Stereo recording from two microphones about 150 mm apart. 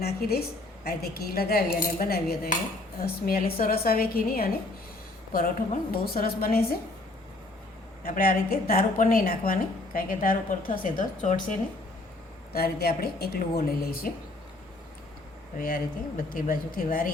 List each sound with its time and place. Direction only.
0.0 s a woman's voice: 90° left
0.9 s cutlery: 90° left
3.0 s a woman's voice: 80° left
8.0 s a woman's voice: 75° left (ahead or behind)
12.5 s cutlery: 90° left
16.3 s a woman's voice: 70° left (ahead or behind)